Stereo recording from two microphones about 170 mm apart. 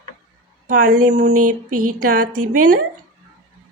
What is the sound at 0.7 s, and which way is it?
A woman's voice, 55° right (ahead or behind).